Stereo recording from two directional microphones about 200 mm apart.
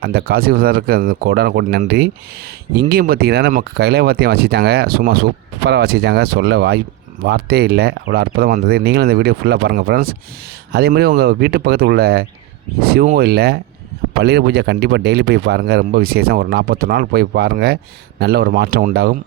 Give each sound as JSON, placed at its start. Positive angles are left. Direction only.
{"t": 0.0, "sound": "speech", "side_deg": -50}
{"t": 2.9, "sound": "speech", "side_deg": -50}